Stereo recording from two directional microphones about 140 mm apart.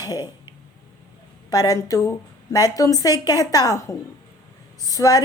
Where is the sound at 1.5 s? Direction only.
25° left (ahead or behind).